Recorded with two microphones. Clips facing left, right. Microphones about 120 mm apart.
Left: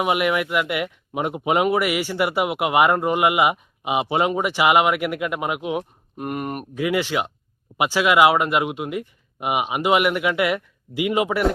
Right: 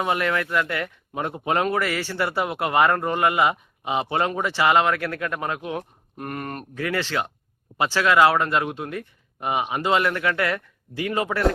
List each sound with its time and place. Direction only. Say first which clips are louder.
0.0 s speech: left 3 dB; 15° left (ahead or behind)